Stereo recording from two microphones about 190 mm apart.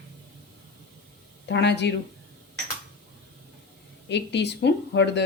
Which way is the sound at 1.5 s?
65° left (ahead or behind).